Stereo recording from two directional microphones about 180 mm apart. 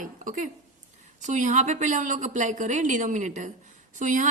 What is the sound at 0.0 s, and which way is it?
A woman's voice, 45° right (ahead or behind).